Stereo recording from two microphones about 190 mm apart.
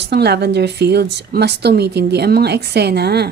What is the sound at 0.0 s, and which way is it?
A woman's voice, 60° right (ahead or behind).